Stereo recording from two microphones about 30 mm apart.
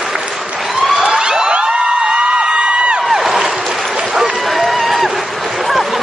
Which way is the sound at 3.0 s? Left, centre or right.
Centre.